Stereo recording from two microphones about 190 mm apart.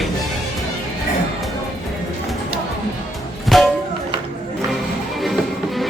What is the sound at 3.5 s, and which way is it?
Music, centre (ahead or behind).